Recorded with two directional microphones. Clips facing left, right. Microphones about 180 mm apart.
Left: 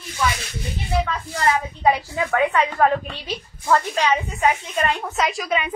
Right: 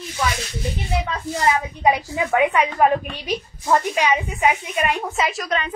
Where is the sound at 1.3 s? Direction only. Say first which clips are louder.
Right 1 dB; 15° right (ahead or behind).